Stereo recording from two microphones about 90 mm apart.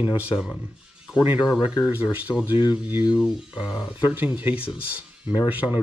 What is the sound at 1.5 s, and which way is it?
Speech, 10° right (ahead or behind).